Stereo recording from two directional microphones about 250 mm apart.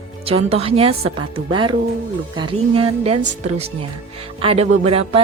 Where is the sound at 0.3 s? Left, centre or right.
Right.